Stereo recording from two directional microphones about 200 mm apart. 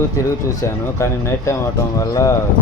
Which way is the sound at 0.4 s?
15° left (ahead or behind).